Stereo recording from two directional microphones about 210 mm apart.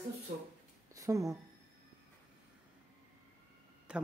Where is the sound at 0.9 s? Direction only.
15° right (ahead or behind).